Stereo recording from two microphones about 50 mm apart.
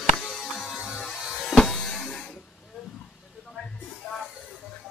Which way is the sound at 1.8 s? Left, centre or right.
Centre.